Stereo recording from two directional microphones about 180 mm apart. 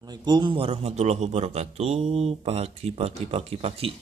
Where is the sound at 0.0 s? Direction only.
25° right (ahead or behind).